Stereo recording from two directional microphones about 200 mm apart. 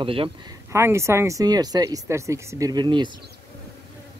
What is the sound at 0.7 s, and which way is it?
Speech, 15° right (ahead or behind).